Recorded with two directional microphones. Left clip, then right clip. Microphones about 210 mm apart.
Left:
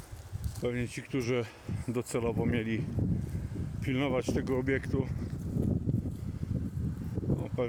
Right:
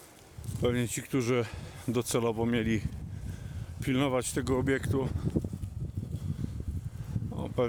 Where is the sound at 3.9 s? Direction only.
30° right (ahead or behind).